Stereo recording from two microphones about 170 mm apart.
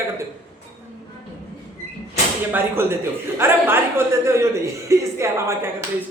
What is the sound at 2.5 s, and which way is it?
Speech, 15° right (ahead or behind).